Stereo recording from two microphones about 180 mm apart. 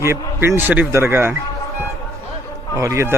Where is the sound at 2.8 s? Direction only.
15° right (ahead or behind).